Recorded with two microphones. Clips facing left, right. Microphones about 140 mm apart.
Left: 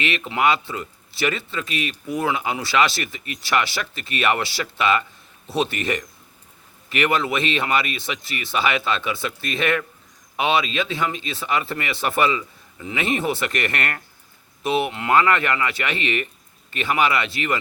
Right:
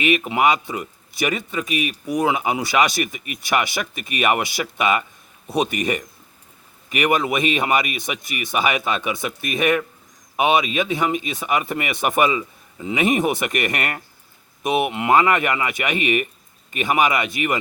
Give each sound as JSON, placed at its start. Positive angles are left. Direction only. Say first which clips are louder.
{"t": 0.2, "sound": "speech", "louder": "right 2 dB", "side_deg": -15}